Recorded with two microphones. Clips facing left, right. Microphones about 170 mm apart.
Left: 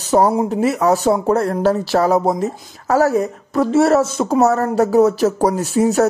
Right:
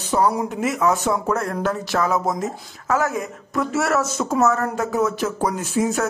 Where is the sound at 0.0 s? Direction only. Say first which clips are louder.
Left 5 dB; 40° left (ahead or behind).